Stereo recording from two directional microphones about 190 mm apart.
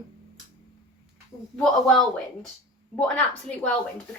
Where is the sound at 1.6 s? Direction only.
Centre (ahead or behind).